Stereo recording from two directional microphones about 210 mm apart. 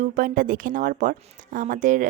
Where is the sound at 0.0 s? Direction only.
40° right (ahead or behind).